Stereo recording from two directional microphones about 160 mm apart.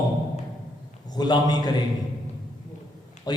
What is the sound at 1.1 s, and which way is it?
Speech, 25° left (ahead or behind).